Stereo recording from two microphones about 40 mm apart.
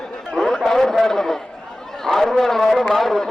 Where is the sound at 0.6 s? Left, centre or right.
Centre.